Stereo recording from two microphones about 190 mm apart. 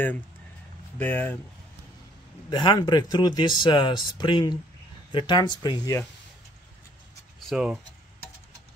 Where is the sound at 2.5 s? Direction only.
25° left (ahead or behind).